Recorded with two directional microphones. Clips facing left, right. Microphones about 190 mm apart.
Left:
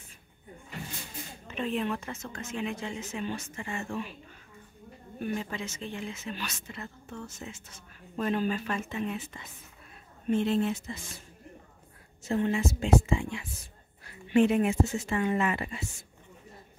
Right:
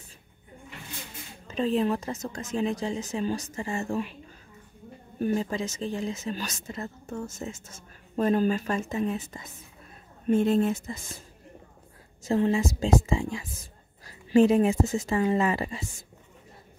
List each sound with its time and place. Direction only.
1.5 s a woman's voice: 35° right (ahead or behind)
5.2 s a woman's voice: 35° right (ahead or behind)
12.2 s a woman's voice: 35° right (ahead or behind)